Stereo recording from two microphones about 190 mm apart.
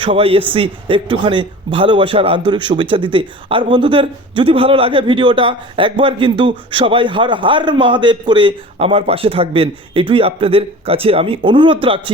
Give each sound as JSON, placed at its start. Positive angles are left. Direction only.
{"t": 0.0, "sound": "speech", "side_deg": -30}